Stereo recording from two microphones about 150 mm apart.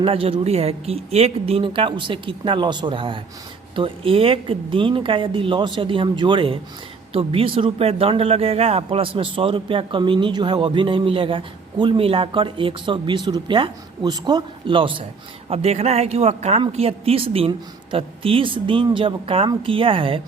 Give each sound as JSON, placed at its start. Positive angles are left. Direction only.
{"t": 0.0, "sound": "a woman's voice", "side_deg": -40}